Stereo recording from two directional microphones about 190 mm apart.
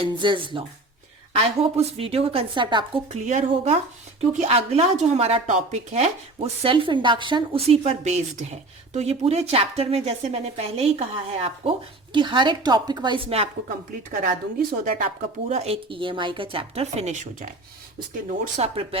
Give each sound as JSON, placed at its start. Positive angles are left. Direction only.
{"t": 0.0, "sound": "speech", "side_deg": -25}
{"t": 3.2, "sound": "speech", "side_deg": -40}
{"t": 14.8, "sound": "speech", "side_deg": -45}